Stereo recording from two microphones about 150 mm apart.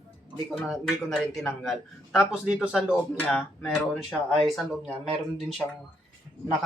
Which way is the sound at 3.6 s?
5° right (ahead or behind).